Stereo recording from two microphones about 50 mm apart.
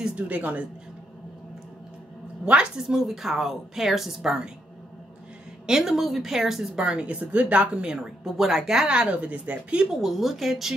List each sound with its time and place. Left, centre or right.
0.1 s a woman's voice: right
2.4 s a woman's voice: centre
5.7 s a woman's voice: centre
6.7 s a woman's voice: centre
9.1 s speech: right
10.0 s a woman's voice: centre